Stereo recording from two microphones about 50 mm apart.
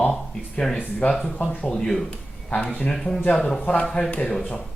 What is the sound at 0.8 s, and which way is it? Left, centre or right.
Speech, left.